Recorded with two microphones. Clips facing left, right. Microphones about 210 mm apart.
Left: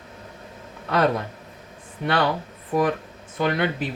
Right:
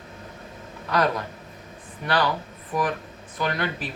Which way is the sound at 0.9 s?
25° left (ahead or behind).